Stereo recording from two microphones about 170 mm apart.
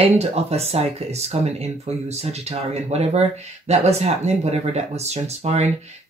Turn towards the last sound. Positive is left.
turn(degrees=-40)  # may be behind; listen again after turning